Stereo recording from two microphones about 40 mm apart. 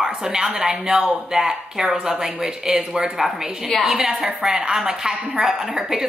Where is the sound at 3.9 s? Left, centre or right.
Centre.